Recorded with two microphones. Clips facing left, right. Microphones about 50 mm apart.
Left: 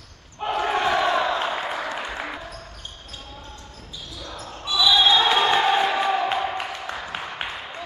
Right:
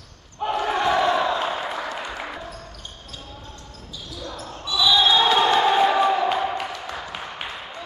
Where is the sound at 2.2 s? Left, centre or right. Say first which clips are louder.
Even; centre.